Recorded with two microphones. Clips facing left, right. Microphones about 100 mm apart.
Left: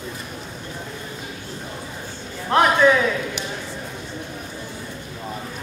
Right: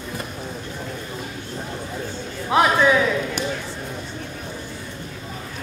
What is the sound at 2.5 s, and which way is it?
Speech, 5° right (ahead or behind).